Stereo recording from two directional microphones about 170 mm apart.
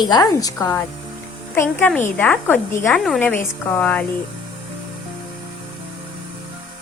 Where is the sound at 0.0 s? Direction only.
20° left (ahead or behind).